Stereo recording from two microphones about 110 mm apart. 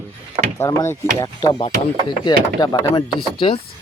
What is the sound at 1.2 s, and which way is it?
Speech, 35° left (ahead or behind).